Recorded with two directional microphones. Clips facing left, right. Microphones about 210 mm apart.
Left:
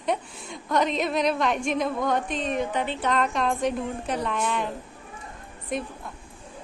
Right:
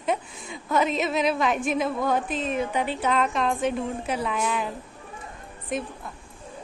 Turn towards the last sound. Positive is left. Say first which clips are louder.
# even
turn(degrees=0)  # may be behind; listen again after turning